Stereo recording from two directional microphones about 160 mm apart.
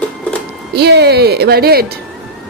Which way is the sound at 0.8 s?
90° right.